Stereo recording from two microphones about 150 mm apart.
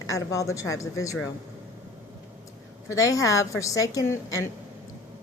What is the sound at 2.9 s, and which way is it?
A woman's voice, 20° left (ahead or behind).